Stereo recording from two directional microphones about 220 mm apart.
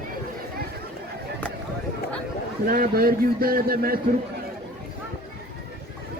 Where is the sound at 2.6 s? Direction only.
40° right (ahead or behind).